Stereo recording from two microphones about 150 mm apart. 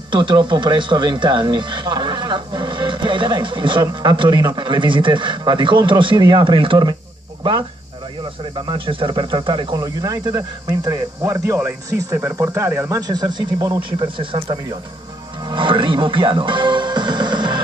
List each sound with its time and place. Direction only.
0.1 s speech: 30° right (ahead or behind)
8.5 s speech: 35° right (ahead or behind)